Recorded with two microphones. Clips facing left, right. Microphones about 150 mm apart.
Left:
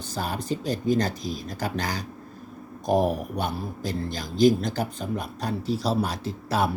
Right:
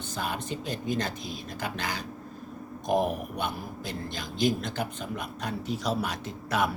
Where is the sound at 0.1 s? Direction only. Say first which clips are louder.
Left 4 dB; 35° left (ahead or behind).